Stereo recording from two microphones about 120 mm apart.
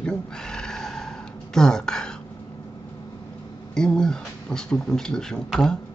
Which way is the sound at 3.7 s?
5° left (ahead or behind).